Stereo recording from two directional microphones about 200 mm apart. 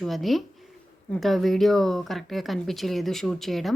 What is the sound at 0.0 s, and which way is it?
Speech, centre (ahead or behind).